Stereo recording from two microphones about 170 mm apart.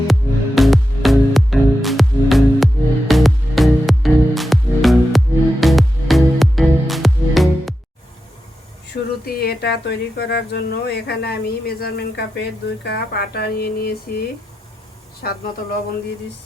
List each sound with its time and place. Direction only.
0.1 s music: centre (ahead or behind)
9.2 s speech: 70° left (ahead or behind)